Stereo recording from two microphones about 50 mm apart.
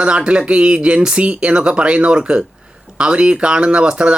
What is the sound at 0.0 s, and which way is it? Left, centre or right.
Speech, right.